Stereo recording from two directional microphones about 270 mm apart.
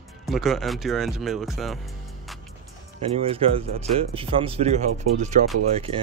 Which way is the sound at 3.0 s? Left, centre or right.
Right.